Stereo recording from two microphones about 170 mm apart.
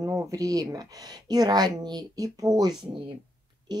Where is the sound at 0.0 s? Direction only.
15° right (ahead or behind).